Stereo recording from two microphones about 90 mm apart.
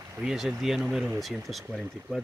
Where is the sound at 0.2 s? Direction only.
5° right (ahead or behind).